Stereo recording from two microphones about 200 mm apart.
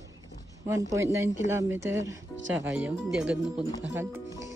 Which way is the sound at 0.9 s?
15° right (ahead or behind).